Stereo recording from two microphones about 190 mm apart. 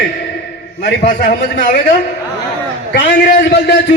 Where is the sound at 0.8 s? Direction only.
50° left (ahead or behind).